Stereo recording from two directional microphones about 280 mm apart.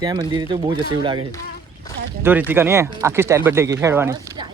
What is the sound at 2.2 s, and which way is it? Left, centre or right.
Speech, centre.